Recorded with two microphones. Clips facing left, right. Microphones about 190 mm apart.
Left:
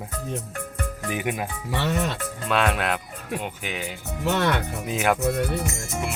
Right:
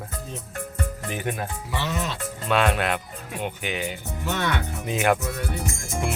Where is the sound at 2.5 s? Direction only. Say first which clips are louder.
Right 1 dB; centre (ahead or behind).